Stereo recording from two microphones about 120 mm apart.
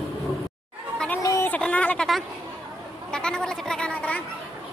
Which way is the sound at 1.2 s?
30° left (ahead or behind).